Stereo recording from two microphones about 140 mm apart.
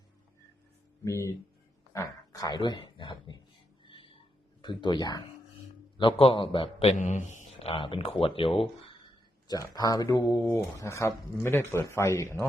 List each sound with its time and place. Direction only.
1.0 s speech: 20° left (ahead or behind)
1.9 s dog: 25° left (ahead or behind)
3.8 s a sound: 35° left (ahead or behind)
4.6 s a man's voice: 35° left (ahead or behind)
7.0 s a man's voice: 60° left (ahead or behind); by 9.0 s 40° left (ahead or behind)
9.5 s speech: 25° left (ahead or behind)
10.2 s speech: 15° left (ahead or behind)